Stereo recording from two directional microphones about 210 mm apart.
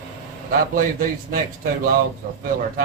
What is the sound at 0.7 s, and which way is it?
Speech, 45° right (ahead or behind).